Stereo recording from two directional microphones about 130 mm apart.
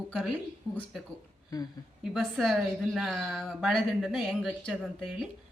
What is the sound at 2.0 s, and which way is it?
A woman's voice, centre (ahead or behind).